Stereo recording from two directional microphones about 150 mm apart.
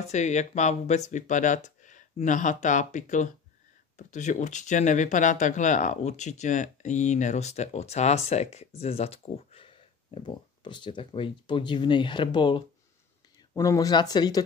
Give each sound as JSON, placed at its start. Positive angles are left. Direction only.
{"t": 0.0, "sound": "speech", "side_deg": 50}